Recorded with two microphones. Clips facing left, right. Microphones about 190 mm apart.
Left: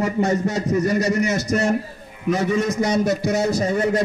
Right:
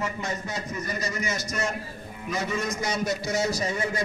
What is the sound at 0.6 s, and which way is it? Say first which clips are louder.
A man's voice: left 13 dB; 75° left (ahead or behind).